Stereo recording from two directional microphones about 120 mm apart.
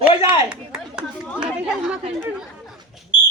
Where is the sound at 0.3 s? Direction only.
10° right (ahead or behind).